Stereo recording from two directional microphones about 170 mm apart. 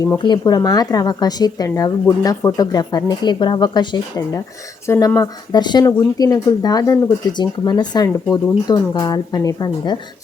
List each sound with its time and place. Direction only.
0.2 s speech: 25° left (ahead or behind)